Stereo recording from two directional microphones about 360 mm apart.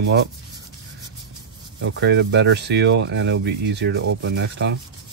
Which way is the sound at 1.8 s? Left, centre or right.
Right.